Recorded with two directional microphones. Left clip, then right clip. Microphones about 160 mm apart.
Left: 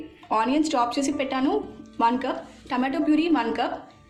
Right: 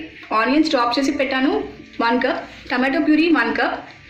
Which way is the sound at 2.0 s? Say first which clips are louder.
Right 5 dB; 75° left (ahead or behind).